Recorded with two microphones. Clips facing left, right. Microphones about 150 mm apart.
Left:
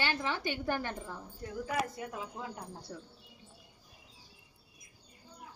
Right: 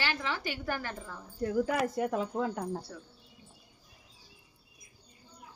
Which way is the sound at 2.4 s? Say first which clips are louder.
Right 10 dB; 55° right (ahead or behind).